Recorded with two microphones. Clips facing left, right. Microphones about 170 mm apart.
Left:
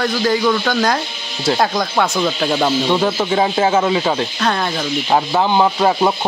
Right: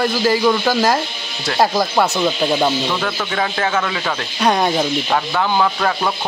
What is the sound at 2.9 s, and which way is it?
Speech, 25° left (ahead or behind).